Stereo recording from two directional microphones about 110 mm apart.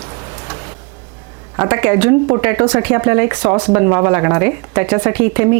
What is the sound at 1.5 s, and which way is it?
Speech, 25° right (ahead or behind).